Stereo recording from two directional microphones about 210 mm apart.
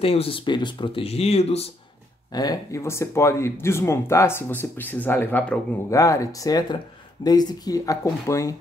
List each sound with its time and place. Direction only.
0.0 s speech: 25° left (ahead or behind)
2.3 s speech: 20° left (ahead or behind)